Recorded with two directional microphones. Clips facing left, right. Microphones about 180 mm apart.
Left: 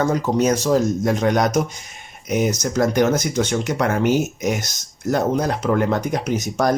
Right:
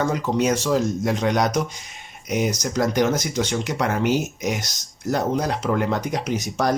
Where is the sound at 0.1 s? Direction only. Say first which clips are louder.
Left 3 dB; 40° left (ahead or behind).